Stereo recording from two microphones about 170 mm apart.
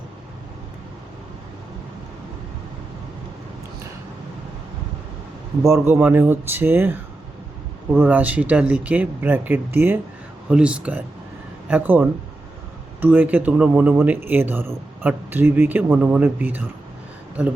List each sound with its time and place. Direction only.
5.6 s speech: 15° right (ahead or behind)
7.9 s speech: 10° right (ahead or behind)